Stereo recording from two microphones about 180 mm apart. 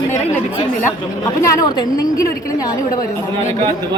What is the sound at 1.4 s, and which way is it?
Speech, 20° left (ahead or behind).